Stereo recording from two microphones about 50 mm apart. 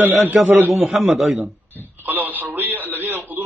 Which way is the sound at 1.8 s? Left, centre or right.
Right.